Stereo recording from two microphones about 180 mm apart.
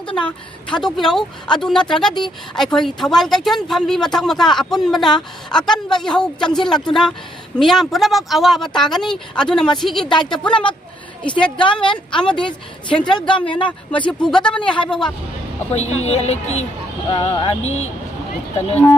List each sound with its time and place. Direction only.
0.1 s speech: 5° left (ahead or behind)
11.5 s a woman's voice: 25° left (ahead or behind)
12.2 s speech: 5° left (ahead or behind)
12.5 s a woman's voice: 25° left (ahead or behind)
13.6 s speech: 5° left (ahead or behind)
14.6 s a woman's voice: 25° left (ahead or behind)
14.8 s speech: 5° left (ahead or behind)
15.7 s speech: 35° left (ahead or behind)